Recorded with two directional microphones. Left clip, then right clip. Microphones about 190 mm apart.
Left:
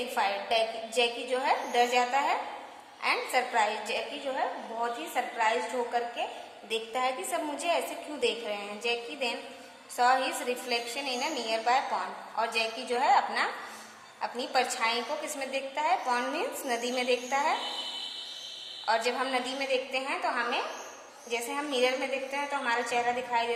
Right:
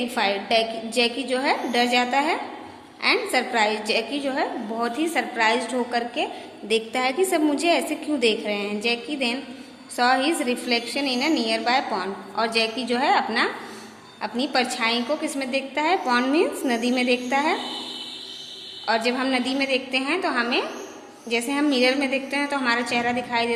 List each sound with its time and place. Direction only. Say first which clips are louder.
0.1 s a woman's voice: right 6 dB; 15° right (ahead or behind)
18.9 s a woman's voice: right 6 dB; 10° right (ahead or behind)